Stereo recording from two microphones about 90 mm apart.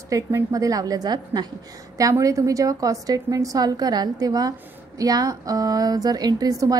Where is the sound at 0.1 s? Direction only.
40° right (ahead or behind).